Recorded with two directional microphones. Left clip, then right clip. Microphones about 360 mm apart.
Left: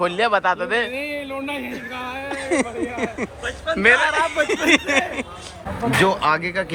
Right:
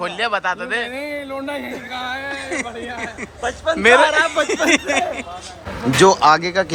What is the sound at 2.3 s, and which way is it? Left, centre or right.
A man's voice, centre.